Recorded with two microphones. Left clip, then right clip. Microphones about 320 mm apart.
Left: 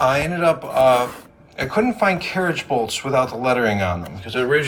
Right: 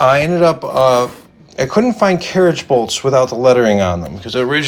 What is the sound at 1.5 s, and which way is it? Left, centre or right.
Speech, centre.